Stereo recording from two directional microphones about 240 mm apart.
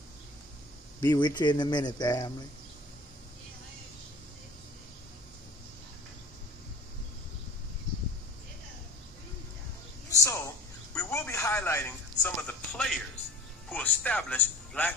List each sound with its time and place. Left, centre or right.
1.0 s speech: centre
10.1 s a sound: centre
13.7 s music: centre